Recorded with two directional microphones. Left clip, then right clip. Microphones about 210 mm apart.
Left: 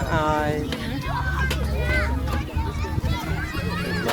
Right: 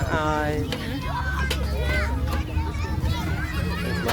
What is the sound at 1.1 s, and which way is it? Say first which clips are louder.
Vehicle: left 2 dB; 50° right (ahead or behind).